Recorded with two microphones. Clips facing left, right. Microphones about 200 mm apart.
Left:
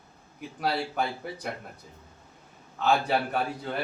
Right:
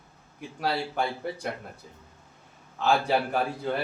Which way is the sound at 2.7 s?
Centre (ahead or behind).